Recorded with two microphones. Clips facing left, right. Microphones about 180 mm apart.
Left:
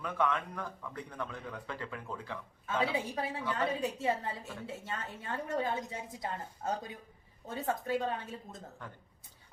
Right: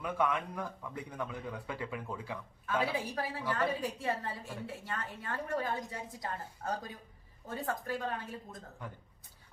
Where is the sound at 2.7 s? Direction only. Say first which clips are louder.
Left 1 dB; 25° left (ahead or behind).